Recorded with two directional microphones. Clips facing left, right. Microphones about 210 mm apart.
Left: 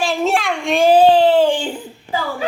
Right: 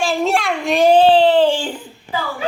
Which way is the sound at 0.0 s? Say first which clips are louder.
Even; centre (ahead or behind).